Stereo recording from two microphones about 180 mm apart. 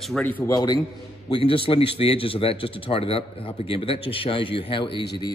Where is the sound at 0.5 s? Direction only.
20° left (ahead or behind).